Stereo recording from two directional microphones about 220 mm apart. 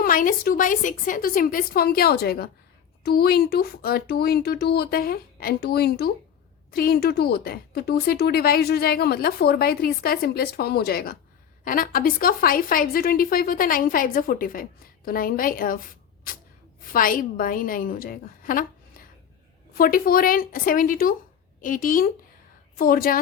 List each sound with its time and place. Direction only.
0.0 s a woman's voice: 40° left (ahead or behind)
16.8 s a woman's voice: 40° left (ahead or behind)